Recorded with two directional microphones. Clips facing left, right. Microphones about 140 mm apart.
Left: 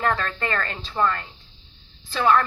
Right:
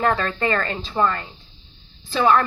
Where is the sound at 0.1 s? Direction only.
20° right (ahead or behind).